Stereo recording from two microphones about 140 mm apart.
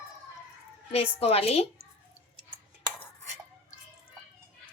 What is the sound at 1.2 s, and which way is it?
Speech, 45° left (ahead or behind).